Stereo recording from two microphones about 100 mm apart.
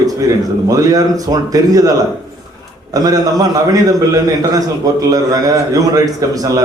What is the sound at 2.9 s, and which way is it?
A man's voice, 40° right (ahead or behind).